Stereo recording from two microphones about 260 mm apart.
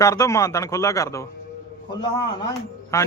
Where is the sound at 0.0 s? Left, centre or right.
Centre.